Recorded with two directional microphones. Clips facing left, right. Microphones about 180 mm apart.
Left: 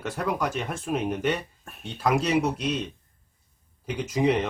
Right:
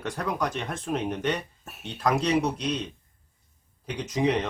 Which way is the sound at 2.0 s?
5° left (ahead or behind).